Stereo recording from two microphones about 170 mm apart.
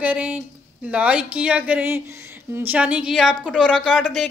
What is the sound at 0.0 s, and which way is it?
Speech, 10° right (ahead or behind).